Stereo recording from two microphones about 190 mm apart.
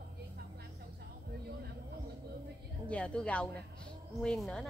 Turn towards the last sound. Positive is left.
turn(degrees=5)  # may be behind; listen again after turning